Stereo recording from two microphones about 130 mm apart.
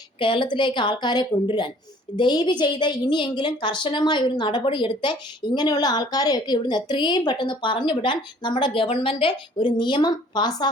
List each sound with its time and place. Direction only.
0.2 s a woman's voice: 40° left (ahead or behind)